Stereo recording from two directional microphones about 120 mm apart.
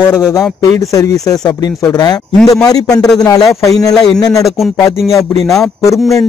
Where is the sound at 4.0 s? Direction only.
5° left (ahead or behind).